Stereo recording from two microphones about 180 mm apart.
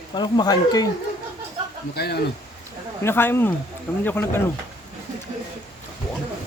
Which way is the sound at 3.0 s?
10° left (ahead or behind).